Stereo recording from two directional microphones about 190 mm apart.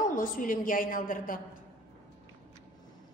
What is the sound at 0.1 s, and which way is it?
A woman's voice, 45° left (ahead or behind).